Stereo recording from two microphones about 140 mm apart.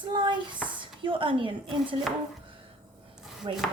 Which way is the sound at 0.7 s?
35° right (ahead or behind).